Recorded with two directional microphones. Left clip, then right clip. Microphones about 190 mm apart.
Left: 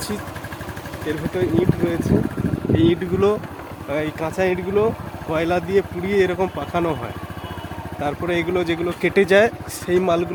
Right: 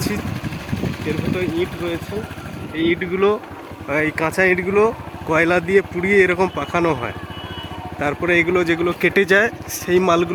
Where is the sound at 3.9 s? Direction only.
5° right (ahead or behind).